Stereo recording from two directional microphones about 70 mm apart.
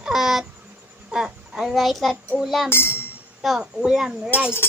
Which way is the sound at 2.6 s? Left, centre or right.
Left.